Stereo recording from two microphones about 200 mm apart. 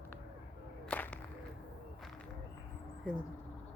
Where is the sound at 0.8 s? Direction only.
5° left (ahead or behind).